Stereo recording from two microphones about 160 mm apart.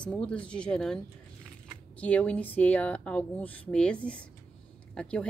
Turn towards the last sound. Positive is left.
turn(degrees=5)  # may be behind; listen again after turning